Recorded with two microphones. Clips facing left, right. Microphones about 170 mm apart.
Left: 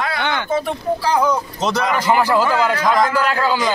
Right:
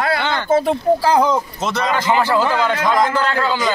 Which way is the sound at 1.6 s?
10° left (ahead or behind).